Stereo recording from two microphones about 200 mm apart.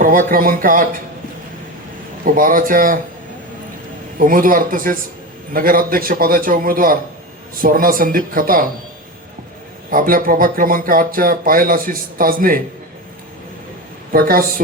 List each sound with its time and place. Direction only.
0.0 s speech: 45° right (ahead or behind)
2.2 s speech: 45° right (ahead or behind)
4.2 s speech: 45° right (ahead or behind)
9.9 s speech: 45° right (ahead or behind)
14.1 s speech: 45° right (ahead or behind)